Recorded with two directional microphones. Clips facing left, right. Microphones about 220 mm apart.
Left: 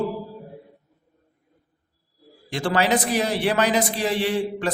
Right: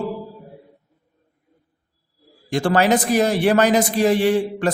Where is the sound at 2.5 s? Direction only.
50° right (ahead or behind).